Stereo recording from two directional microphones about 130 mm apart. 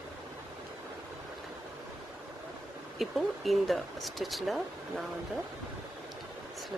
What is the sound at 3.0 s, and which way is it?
Speech, centre (ahead or behind).